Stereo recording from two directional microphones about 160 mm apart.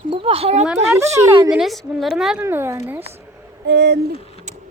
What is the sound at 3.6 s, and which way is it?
Hoot, 90° right.